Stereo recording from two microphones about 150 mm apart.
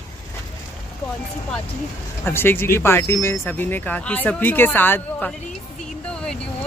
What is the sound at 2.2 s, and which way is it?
Speech, 15° left (ahead or behind).